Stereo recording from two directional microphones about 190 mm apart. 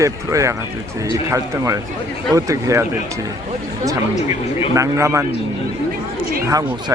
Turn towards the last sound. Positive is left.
turn(degrees=-20)  # may be behind; listen again after turning